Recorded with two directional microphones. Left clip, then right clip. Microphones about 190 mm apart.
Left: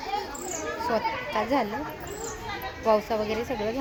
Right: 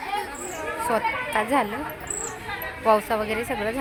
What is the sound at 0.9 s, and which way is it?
Speech, 10° right (ahead or behind).